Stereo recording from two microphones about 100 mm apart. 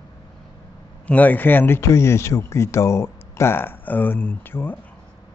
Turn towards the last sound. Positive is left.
turn(degrees=20)  # may be behind; listen again after turning